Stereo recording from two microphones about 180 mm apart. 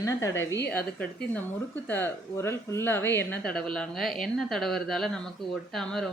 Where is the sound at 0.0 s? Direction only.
20° left (ahead or behind).